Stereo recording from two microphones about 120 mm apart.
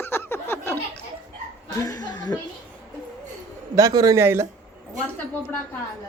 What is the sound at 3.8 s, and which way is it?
Speech, 30° right (ahead or behind).